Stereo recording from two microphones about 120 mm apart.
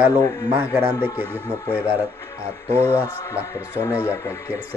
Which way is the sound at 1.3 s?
20° left (ahead or behind).